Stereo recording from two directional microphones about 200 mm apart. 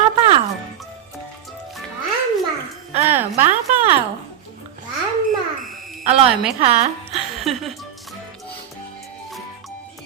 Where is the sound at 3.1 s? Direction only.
10° right (ahead or behind).